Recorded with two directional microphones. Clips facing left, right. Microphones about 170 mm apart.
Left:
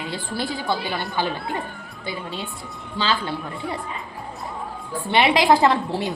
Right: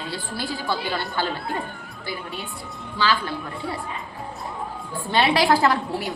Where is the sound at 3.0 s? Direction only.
25° left (ahead or behind).